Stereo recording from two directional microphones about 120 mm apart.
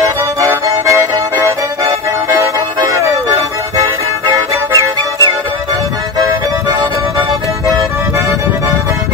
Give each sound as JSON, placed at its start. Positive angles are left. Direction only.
{"t": 0.7, "sound": "music", "side_deg": -25}
{"t": 2.8, "sound": "music", "side_deg": -25}
{"t": 4.3, "sound": "music", "side_deg": -30}